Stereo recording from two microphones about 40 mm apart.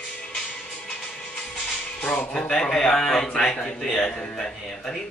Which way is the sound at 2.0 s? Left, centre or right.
Left.